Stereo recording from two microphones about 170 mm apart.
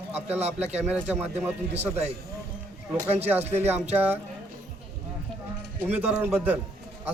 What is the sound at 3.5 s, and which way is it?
Speech, 10° right (ahead or behind).